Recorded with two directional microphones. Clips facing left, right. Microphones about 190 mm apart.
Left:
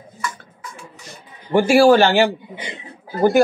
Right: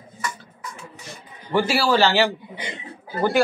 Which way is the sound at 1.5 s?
50° left (ahead or behind).